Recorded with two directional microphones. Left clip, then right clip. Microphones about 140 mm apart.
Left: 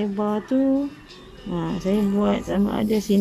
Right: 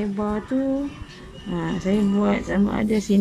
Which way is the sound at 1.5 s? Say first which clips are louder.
Even; 10° left (ahead or behind).